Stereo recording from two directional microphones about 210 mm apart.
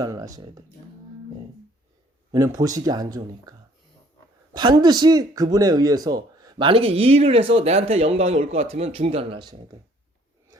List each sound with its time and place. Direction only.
0.0 s speech: 15° right (ahead or behind)
2.3 s speech: 15° right (ahead or behind)
4.5 s speech: 20° right (ahead or behind)